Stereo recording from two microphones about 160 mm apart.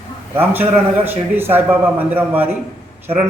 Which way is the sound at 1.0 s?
10° right (ahead or behind).